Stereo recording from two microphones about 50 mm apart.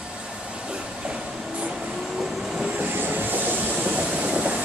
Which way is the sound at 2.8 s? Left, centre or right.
Right.